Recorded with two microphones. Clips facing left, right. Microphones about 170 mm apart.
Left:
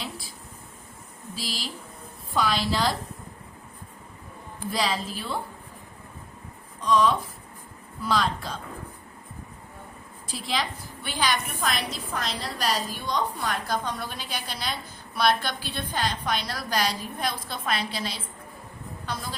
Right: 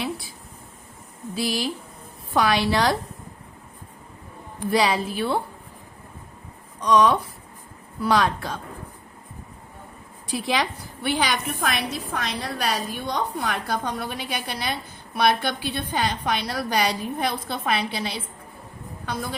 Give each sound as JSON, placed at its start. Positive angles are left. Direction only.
{"t": 1.4, "sound": "a woman's voice", "side_deg": -65}
{"t": 4.7, "sound": "a woman's voice", "side_deg": -70}
{"t": 6.8, "sound": "a woman's voice", "side_deg": -70}
{"t": 10.3, "sound": "a woman's voice", "side_deg": -65}